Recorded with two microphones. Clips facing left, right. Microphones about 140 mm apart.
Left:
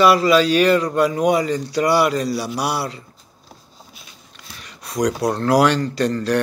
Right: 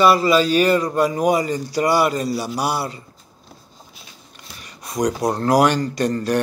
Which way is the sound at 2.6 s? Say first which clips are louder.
Right 1 dB; centre (ahead or behind).